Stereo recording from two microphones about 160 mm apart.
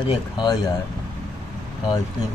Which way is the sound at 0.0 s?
25° left (ahead or behind).